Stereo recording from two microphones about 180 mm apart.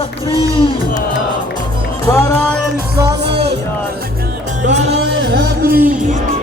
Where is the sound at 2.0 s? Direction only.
15° left (ahead or behind).